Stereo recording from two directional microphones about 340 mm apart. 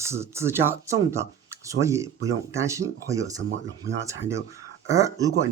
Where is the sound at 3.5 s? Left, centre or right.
Right.